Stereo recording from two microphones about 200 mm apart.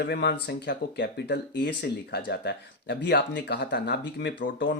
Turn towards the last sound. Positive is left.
turn(degrees=65)  # may be behind; listen again after turning